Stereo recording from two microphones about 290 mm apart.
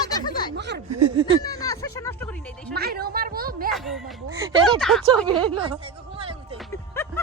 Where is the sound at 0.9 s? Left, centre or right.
Right.